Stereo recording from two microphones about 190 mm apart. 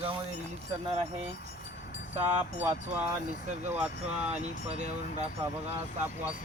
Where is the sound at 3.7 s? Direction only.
5° right (ahead or behind).